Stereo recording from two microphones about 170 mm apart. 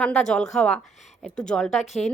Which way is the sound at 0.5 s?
5° left (ahead or behind).